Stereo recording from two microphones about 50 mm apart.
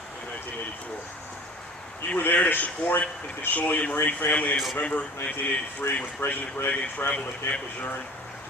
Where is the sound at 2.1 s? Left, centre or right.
Left.